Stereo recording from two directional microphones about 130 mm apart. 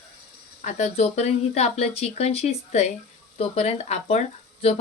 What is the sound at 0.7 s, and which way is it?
Speech, 60° left (ahead or behind).